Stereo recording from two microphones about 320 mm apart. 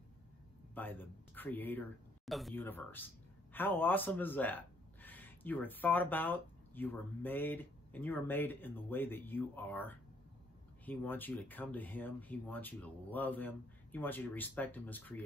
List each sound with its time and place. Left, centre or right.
0.7 s speech: centre